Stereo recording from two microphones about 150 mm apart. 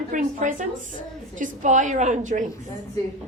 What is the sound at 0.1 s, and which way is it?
A woman's voice, 55° right (ahead or behind).